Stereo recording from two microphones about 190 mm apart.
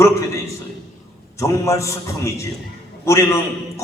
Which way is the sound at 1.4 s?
15° left (ahead or behind).